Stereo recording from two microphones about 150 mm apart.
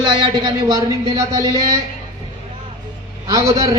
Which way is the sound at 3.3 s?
20° right (ahead or behind).